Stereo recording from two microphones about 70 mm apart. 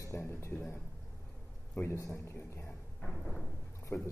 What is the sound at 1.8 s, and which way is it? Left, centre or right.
Speech, left.